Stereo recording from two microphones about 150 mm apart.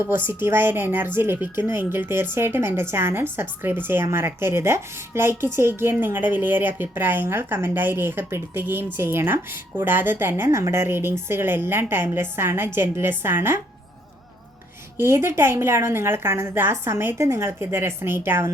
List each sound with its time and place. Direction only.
0.1 s a woman's voice: 15° right (ahead or behind)
14.9 s a woman's voice: 15° right (ahead or behind)